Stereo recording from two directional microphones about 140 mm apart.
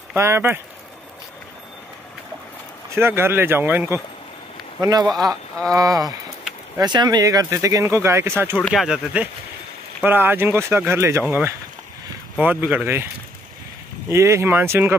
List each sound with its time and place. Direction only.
0.1 s speech: 15° right (ahead or behind)
2.9 s speech: 15° right (ahead or behind)
4.8 s speech: 30° right (ahead or behind)
8.5 s speech: centre (ahead or behind); by 15.0 s 15° right (ahead or behind)